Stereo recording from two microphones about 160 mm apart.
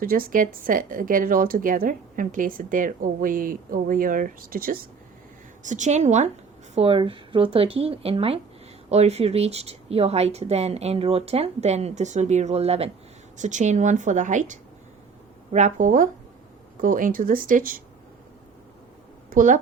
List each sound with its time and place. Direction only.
0.0 s speech: 65° right (ahead or behind)
5.6 s a woman's voice: 50° right (ahead or behind)
6.7 s a woman's voice: 35° right (ahead or behind); by 17.8 s 60° right (ahead or behind)
19.3 s speech: 55° right (ahead or behind)